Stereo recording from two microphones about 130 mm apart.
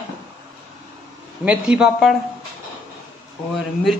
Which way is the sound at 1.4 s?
10° right (ahead or behind).